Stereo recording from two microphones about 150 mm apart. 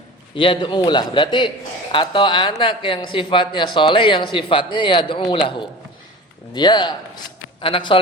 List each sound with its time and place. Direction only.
0.3 s a man's voice: 35° left (ahead or behind)